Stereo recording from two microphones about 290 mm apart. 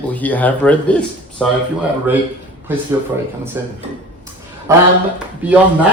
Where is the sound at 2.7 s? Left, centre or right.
Centre.